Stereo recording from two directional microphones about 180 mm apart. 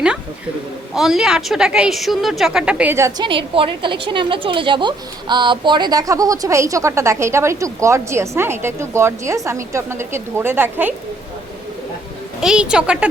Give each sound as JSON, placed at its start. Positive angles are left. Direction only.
{"t": 0.9, "sound": "a woman's voice", "side_deg": 0}
{"t": 3.2, "sound": "a woman's voice", "side_deg": -30}
{"t": 12.4, "sound": "a woman's voice", "side_deg": -5}